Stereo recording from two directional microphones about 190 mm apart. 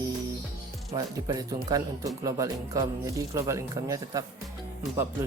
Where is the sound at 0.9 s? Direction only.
20° right (ahead or behind).